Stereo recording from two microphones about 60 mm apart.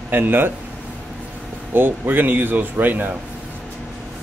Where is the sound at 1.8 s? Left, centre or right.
Right.